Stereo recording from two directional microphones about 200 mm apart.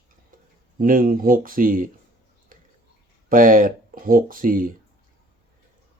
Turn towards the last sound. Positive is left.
turn(degrees=-45)  # may be behind; listen again after turning